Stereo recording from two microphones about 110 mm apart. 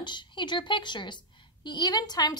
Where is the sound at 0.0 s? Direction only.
45° left (ahead or behind).